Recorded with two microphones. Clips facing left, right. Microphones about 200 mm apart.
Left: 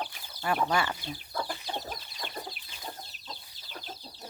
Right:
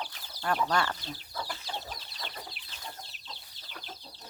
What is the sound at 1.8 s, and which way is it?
Chicken, 50° left (ahead or behind).